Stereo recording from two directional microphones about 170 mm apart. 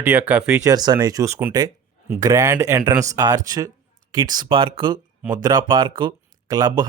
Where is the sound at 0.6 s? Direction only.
25° right (ahead or behind).